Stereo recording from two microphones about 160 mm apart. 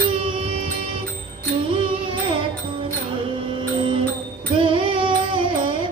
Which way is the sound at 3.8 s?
35° right (ahead or behind).